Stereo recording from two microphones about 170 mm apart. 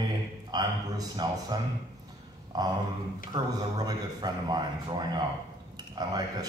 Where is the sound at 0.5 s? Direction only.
20° right (ahead or behind).